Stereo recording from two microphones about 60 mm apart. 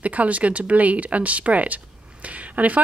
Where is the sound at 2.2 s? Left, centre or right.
Right.